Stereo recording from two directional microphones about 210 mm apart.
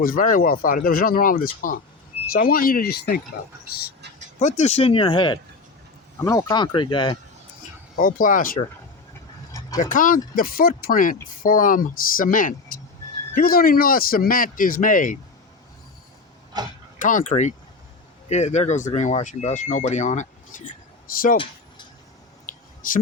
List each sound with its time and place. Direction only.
0.0 s speech: 40° left (ahead or behind)
4.4 s speech: 35° left (ahead or behind)
7.9 s speech: 40° left (ahead or behind)
9.7 s speech: 40° left (ahead or behind)
16.5 s speech: 20° right (ahead or behind)
17.0 s speech: 40° left (ahead or behind)
22.4 s a sound: 40° left (ahead or behind)